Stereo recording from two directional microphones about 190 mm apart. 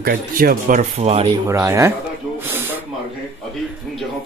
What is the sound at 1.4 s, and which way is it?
Speech, 15° right (ahead or behind).